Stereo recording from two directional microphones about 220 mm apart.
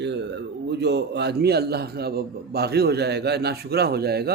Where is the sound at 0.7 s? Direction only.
50° right (ahead or behind).